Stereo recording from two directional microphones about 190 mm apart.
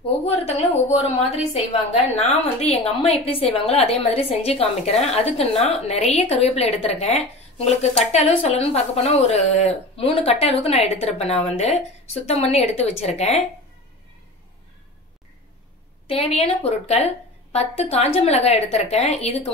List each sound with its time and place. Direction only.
0.0 s a woman's voice: 30° left (ahead or behind)
2.1 s a woman's voice: 35° left (ahead or behind)
16.1 s a woman's voice: 30° left (ahead or behind)